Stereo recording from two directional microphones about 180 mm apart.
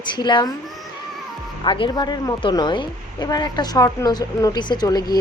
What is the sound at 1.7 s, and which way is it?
A woman's voice, 30° left (ahead or behind).